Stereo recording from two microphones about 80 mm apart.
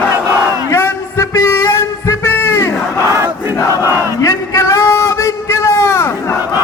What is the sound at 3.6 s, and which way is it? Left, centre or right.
Battle cry, left.